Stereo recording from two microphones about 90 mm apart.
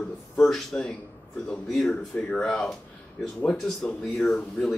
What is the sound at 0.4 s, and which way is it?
Speech, 5° left (ahead or behind).